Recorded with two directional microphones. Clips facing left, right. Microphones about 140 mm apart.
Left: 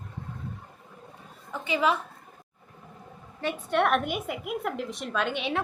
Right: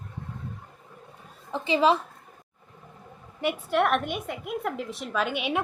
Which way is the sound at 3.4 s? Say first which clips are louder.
Right 3 dB; 15° right (ahead or behind).